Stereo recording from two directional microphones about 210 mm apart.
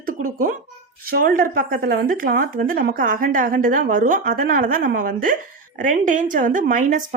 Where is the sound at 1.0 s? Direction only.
45° right (ahead or behind).